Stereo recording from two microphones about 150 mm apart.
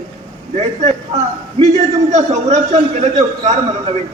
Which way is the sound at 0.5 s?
45° right (ahead or behind).